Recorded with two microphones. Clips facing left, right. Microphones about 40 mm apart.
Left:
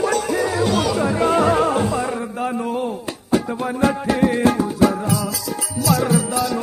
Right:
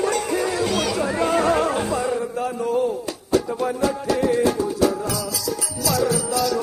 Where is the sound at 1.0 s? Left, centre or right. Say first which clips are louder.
Left 2 dB; left.